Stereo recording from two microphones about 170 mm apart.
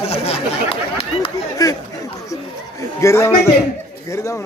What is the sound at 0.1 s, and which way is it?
Speech, 35° left (ahead or behind).